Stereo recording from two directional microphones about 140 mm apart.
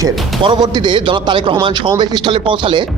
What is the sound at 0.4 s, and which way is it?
Speech, 30° right (ahead or behind).